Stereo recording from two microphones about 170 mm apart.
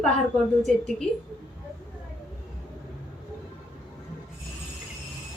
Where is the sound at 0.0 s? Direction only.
Centre (ahead or behind).